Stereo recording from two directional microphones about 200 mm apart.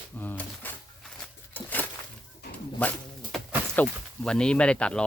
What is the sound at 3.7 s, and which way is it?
Speech, 5° left (ahead or behind).